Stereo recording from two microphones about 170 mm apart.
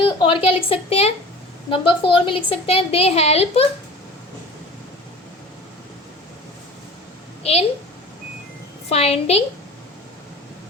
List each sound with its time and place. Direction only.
0.0 s a woman's voice: 30° left (ahead or behind)
8.9 s a woman's voice: 35° left (ahead or behind)